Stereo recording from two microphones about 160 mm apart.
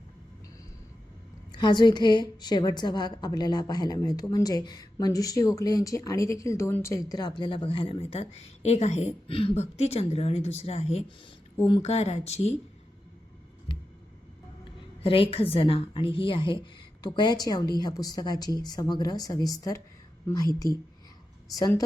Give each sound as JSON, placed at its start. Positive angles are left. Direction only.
{"t": 1.5, "sound": "a woman's voice", "side_deg": 30}
{"t": 13.7, "sound": "a sound", "side_deg": 30}
{"t": 15.0, "sound": "a woman's voice", "side_deg": 35}